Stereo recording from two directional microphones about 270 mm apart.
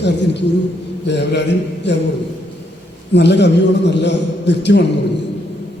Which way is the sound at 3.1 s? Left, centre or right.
Left.